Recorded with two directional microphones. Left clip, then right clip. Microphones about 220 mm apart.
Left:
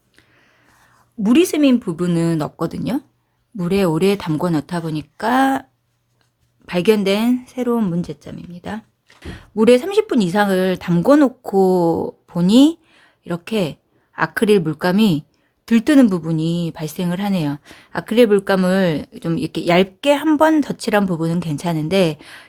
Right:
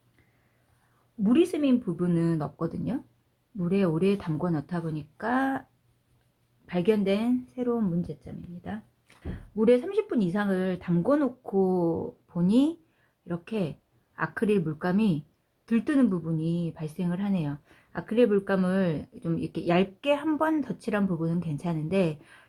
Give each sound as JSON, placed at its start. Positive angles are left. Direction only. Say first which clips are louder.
{"t": 1.2, "sound": "a woman's voice", "louder": "left 10 dB", "side_deg": 40}
{"t": 6.7, "sound": "a woman's voice", "louder": "left 10 dB", "side_deg": 40}